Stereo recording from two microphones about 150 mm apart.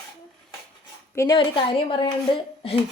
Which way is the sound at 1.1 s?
20° left (ahead or behind).